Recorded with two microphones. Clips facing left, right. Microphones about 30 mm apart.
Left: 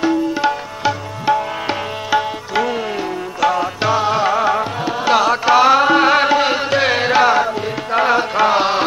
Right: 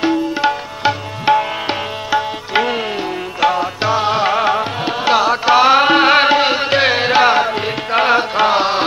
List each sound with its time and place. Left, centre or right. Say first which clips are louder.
0.0 s tabla: right 1 dB; right
1.3 s music: right 3 dB; right
2.5 s music: right 2 dB; right
3.3 s music: right 1 dB; centre
4.0 s music: right 2 dB; right
5.1 s music: even; centre
5.8 s music: right 2 dB; right
7.4 s music: right 2 dB; right
8.2 s music: even; right